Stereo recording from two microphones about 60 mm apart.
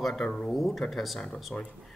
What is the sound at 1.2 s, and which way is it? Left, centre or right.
Speech, centre.